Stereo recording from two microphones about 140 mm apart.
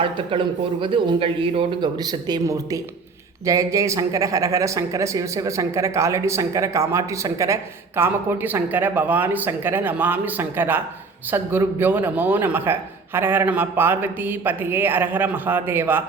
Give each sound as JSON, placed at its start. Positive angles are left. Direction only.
{"t": 0.0, "sound": "speech", "side_deg": -40}